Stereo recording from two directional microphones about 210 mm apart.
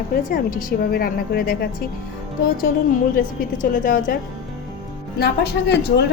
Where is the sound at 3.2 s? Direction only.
40° left (ahead or behind).